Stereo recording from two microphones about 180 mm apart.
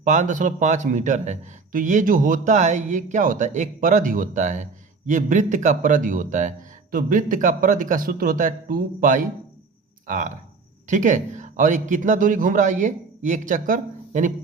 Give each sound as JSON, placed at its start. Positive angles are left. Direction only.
{"t": 0.0, "sound": "a man's voice", "side_deg": -45}